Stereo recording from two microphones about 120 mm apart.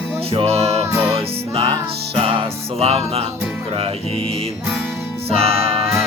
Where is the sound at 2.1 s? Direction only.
50° right (ahead or behind).